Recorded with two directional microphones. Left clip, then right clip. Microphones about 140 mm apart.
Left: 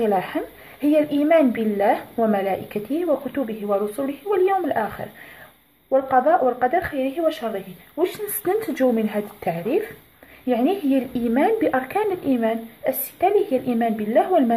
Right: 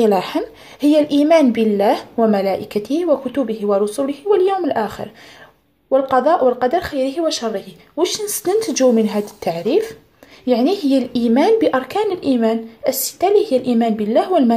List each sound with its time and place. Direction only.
0.0 s a woman's voice: 50° right (ahead or behind)